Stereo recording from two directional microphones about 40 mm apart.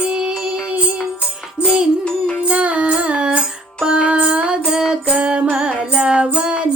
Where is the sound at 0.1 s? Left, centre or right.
Centre.